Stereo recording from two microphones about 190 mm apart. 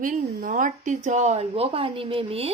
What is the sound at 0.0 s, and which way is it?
Speech, 45° right (ahead or behind).